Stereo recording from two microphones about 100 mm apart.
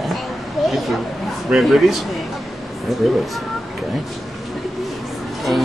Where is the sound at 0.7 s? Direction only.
Centre (ahead or behind).